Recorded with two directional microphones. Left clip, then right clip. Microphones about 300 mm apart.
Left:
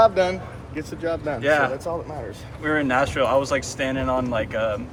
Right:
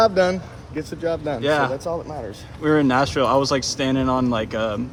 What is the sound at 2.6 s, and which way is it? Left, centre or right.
Speech, centre.